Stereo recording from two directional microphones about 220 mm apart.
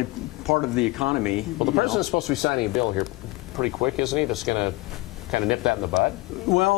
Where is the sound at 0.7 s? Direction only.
5° right (ahead or behind).